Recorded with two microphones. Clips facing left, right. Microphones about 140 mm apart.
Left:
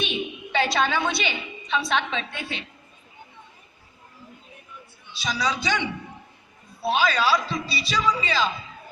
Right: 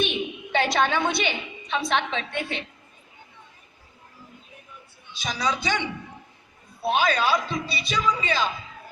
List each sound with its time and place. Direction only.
0.0 s a woman's voice: 55° right (ahead or behind)
5.1 s music: 50° right (ahead or behind)
6.8 s music: 50° right (ahead or behind)